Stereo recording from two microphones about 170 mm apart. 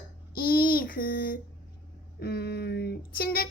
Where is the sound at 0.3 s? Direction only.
60° left (ahead or behind).